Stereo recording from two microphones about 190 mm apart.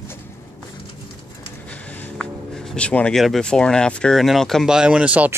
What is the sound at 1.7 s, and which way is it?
Speech, 10° left (ahead or behind).